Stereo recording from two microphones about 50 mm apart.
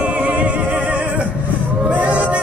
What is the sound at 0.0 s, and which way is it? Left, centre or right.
Music, right.